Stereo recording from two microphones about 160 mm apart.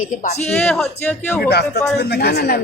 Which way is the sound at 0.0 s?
50° left (ahead or behind).